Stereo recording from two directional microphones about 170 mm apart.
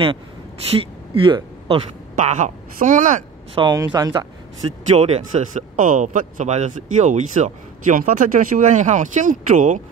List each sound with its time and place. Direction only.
0.7 s speech: 30° right (ahead or behind); by 3.2 s 50° right (ahead or behind)
3.5 s speech: 25° right (ahead or behind)
4.9 s speech: 40° right (ahead or behind)